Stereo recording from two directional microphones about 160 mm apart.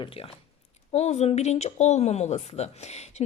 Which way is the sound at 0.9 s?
45° left (ahead or behind).